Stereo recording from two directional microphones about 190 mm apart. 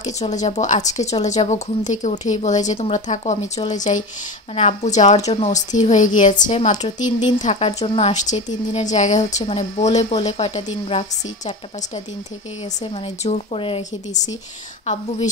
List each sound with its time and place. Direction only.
0.0 s a woman's voice: 40° left (ahead or behind)
12.8 s speech: 30° left (ahead or behind)